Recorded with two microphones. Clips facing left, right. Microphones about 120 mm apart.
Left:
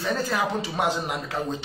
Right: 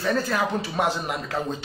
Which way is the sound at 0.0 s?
15° left (ahead or behind).